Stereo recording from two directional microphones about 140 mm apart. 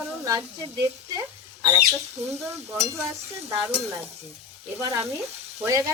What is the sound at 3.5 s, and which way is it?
Stir, 15° right (ahead or behind).